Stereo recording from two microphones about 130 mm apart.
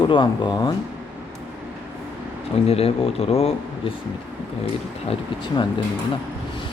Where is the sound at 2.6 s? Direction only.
50° left (ahead or behind).